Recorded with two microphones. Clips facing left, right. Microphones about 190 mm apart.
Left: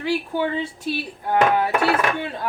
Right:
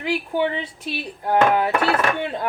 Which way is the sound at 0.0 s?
20° right (ahead or behind).